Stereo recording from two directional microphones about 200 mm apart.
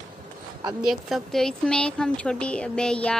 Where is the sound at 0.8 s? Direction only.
Centre (ahead or behind).